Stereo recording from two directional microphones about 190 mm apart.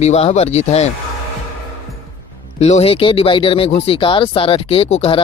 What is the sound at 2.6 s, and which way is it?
Speech, 35° left (ahead or behind).